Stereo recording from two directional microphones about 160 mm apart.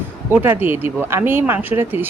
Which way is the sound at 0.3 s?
15° right (ahead or behind).